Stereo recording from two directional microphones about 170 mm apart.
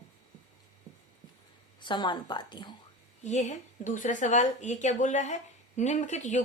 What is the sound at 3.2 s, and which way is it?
A woman's voice, 45° left (ahead or behind).